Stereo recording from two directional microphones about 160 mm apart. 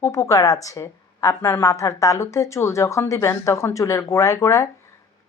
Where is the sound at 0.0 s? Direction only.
20° left (ahead or behind).